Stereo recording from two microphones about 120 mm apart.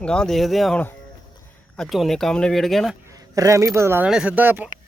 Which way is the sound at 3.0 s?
30° right (ahead or behind).